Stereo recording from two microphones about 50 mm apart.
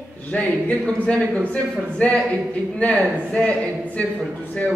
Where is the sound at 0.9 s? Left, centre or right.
Centre.